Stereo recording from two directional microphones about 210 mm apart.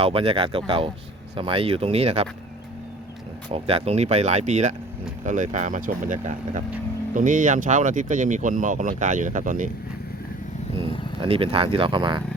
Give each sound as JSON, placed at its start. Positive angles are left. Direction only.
{"t": 0.0, "sound": "speech", "side_deg": -25}
{"t": 3.5, "sound": "speech", "side_deg": -30}
{"t": 11.2, "sound": "speech", "side_deg": -25}